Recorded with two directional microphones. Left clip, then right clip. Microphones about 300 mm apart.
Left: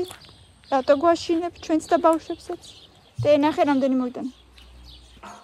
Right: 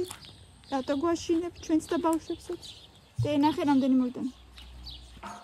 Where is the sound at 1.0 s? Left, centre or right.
Centre.